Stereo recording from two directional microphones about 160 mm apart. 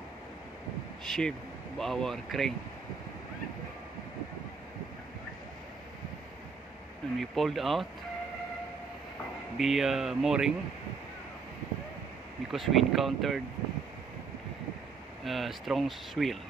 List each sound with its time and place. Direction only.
1.0 s speech: centre (ahead or behind)
7.2 s speech: centre (ahead or behind)
9.6 s speech: centre (ahead or behind)
12.4 s speech: centre (ahead or behind)
15.2 s speech: centre (ahead or behind)